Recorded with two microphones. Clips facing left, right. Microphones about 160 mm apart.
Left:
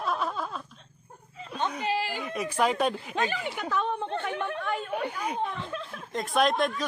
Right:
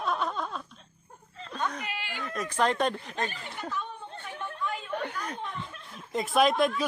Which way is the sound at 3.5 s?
90° left.